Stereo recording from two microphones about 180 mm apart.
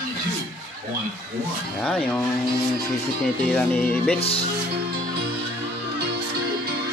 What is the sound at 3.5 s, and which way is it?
Speech, 10° left (ahead or behind).